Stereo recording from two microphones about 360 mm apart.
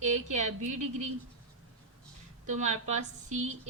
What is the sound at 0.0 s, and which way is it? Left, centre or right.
Speech, centre.